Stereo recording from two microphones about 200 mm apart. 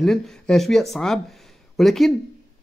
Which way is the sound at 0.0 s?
Centre (ahead or behind).